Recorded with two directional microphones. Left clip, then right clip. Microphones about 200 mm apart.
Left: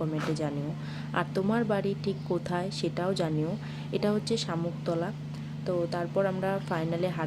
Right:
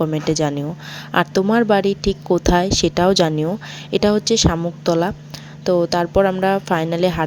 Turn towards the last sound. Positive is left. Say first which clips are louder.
# right 13 dB
turn(degrees=-45)  # may be behind; listen again after turning